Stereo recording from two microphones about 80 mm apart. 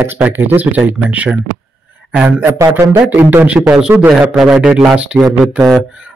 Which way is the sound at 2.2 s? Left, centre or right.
Right.